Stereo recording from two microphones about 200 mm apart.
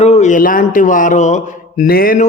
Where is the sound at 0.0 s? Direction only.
35° left (ahead or behind).